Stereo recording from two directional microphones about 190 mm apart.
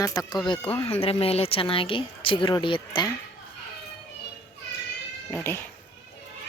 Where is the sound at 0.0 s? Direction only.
20° left (ahead or behind).